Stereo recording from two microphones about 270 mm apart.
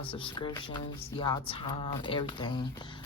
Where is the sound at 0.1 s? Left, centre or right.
Centre.